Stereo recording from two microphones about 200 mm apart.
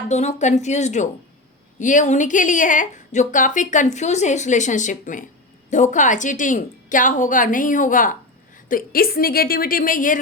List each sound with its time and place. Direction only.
0.1 s a woman's voice: 35° left (ahead or behind)